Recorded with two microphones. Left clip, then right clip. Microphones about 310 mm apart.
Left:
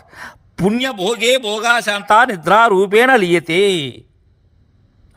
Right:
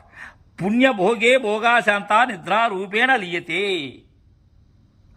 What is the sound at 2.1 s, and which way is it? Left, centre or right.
A man's voice, centre.